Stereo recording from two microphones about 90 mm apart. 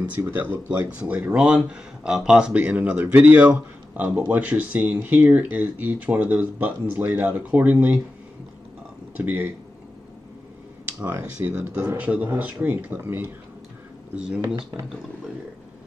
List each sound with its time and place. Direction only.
0.0 s speech: 20° right (ahead or behind)
9.1 s speech: 20° right (ahead or behind)
11.0 s speech: 20° right (ahead or behind)
14.1 s speech: 10° right (ahead or behind)